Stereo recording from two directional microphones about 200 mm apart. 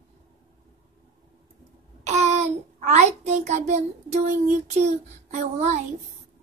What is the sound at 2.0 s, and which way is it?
A child's voice, 35° right (ahead or behind).